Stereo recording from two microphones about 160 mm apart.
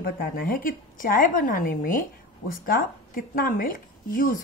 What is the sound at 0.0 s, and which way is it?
A woman's voice, 65° left (ahead or behind).